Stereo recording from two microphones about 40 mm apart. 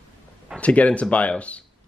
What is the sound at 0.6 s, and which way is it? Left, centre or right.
Speech, left.